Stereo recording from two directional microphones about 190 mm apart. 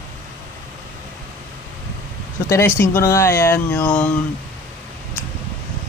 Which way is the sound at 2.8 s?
15° left (ahead or behind).